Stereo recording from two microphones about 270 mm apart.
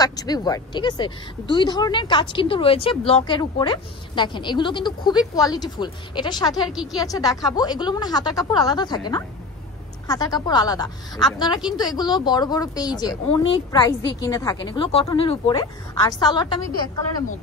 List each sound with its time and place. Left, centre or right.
0.0 s a woman's voice: centre
6.7 s a woman's voice: centre
7.0 s a woman's voice: centre